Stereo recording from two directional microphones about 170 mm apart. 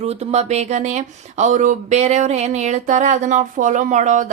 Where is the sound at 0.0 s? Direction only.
40° right (ahead or behind).